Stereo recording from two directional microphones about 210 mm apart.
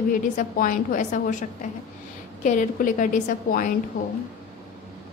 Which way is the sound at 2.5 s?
40° left (ahead or behind).